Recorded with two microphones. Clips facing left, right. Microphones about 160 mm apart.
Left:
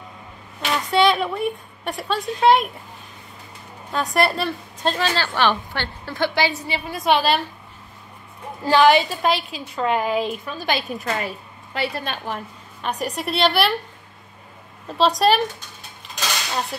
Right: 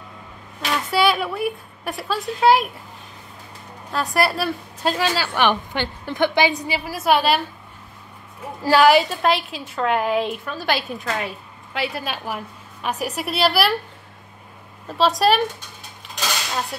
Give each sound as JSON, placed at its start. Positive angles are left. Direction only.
{"t": 0.7, "sound": "a woman's voice", "side_deg": 0}
{"t": 3.9, "sound": "a woman's voice", "side_deg": 0}
{"t": 8.6, "sound": "a woman's voice", "side_deg": -5}
{"t": 14.9, "sound": "a woman's voice", "side_deg": 0}